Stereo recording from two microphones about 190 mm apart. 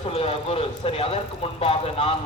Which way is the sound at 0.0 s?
30° left (ahead or behind).